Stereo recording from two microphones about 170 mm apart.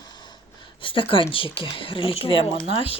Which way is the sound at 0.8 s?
30° left (ahead or behind).